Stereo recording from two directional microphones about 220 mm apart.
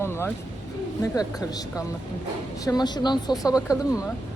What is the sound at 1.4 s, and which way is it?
Speech, 15° left (ahead or behind).